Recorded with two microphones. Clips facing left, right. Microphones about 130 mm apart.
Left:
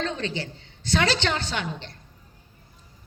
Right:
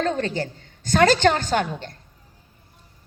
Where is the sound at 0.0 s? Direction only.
45° right (ahead or behind).